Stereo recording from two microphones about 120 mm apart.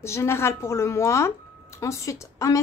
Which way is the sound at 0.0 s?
20° left (ahead or behind).